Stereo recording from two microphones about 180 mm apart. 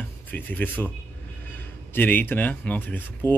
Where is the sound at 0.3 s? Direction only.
10° left (ahead or behind).